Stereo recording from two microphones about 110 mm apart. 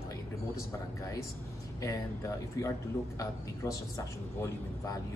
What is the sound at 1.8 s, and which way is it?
A man's voice, 30° left (ahead or behind).